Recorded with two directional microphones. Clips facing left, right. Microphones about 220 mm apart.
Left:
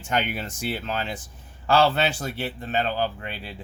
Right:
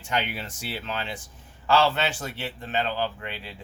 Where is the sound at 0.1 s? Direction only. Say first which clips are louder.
Left 3 dB; 45° left (ahead or behind).